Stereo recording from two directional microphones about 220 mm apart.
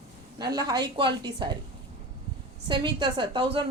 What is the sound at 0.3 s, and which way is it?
A woman's voice, 20° right (ahead or behind).